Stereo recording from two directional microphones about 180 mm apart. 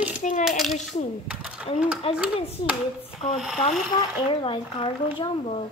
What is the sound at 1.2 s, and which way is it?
Speech, 5° right (ahead or behind).